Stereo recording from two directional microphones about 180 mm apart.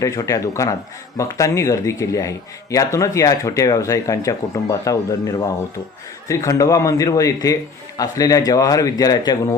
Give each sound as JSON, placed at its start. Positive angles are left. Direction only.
{"t": 0.0, "sound": "a man's voice", "side_deg": 20}